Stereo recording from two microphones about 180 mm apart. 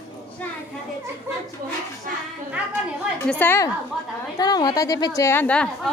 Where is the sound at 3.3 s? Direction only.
10° left (ahead or behind).